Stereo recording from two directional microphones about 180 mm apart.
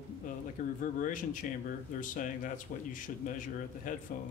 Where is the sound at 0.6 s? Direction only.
50° left (ahead or behind).